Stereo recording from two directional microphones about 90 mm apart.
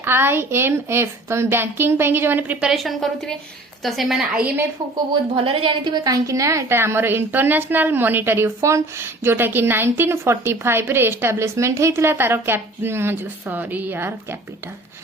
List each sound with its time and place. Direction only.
0.0 s a woman's voice: 25° right (ahead or behind)
2.6 s a woman's voice: 5° right (ahead or behind)
5.4 s a woman's voice: 70° right (ahead or behind); by 14.3 s 25° right (ahead or behind)